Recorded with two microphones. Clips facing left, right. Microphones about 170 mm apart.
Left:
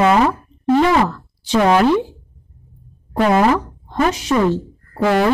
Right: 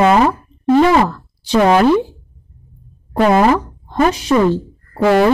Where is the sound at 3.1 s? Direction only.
35° right (ahead or behind).